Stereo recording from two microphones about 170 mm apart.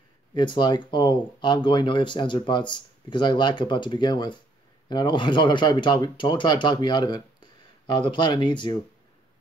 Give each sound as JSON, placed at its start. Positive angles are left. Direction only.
{"t": 0.3, "sound": "speech", "side_deg": 25}